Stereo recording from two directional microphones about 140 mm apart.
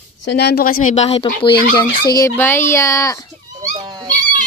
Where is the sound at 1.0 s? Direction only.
40° left (ahead or behind).